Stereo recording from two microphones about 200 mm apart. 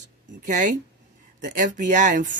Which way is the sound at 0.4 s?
40° right (ahead or behind).